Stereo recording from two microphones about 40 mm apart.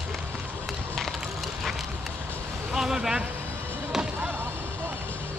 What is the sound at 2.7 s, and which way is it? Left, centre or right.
Speech, centre.